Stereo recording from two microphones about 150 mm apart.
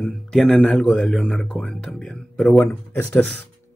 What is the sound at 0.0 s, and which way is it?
Speech, 5° left (ahead or behind).